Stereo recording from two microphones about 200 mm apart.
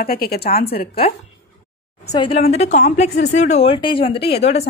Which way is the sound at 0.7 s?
30° left (ahead or behind).